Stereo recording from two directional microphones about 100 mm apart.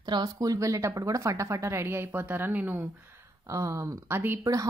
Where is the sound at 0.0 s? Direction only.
40° right (ahead or behind); by 2.8 s 20° right (ahead or behind).